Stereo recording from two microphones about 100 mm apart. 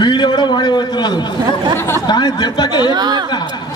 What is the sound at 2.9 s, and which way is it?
Speech, 40° right (ahead or behind).